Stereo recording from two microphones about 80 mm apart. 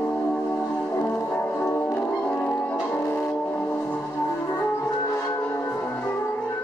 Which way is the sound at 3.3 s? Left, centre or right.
Centre.